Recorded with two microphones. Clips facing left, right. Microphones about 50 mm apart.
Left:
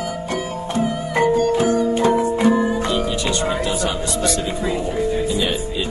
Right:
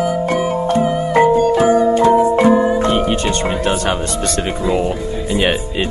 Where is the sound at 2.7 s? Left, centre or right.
Right.